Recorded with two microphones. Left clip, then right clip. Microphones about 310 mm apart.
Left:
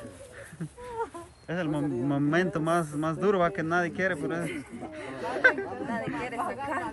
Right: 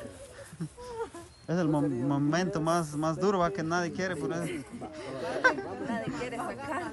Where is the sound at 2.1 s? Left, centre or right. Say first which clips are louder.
Left 6 dB; centre.